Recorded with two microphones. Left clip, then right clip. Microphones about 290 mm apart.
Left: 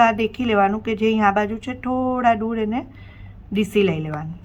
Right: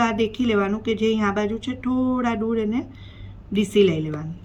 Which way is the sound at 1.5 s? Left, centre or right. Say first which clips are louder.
Left 1 dB; centre.